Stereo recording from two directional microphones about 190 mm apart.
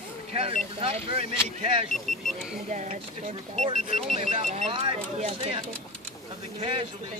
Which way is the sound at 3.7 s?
45° left (ahead or behind).